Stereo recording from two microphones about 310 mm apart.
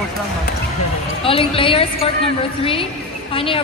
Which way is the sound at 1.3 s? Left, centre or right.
Centre.